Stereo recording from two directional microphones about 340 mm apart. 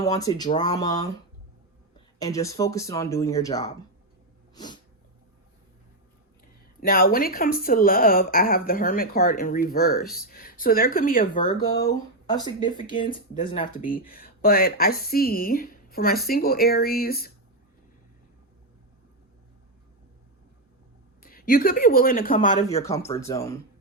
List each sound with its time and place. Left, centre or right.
0.0 s speech: centre
2.1 s speech: centre
4.5 s sneeze: centre
6.7 s speech: left
11.3 s speech: centre
21.2 s speech: left
22.8 s speech: centre